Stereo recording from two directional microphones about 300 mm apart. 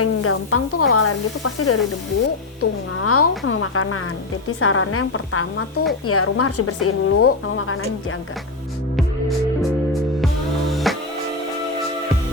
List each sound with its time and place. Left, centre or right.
0.0 s speech: left
10.7 s music: centre